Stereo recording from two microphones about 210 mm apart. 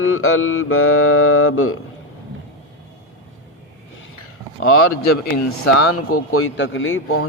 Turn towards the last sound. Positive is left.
turn(degrees=75)  # may be behind; listen again after turning